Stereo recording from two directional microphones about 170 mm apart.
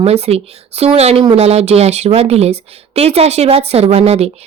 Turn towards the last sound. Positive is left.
turn(degrees=-40)  # may be behind; listen again after turning